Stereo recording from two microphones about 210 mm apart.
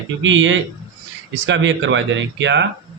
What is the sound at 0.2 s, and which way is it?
Speech, 65° right (ahead or behind).